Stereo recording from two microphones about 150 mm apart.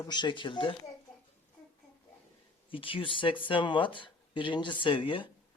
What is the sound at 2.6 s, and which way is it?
Speech, 35° left (ahead or behind).